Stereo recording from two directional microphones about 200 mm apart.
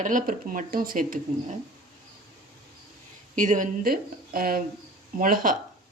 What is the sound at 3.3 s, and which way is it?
Speech, 40° right (ahead or behind).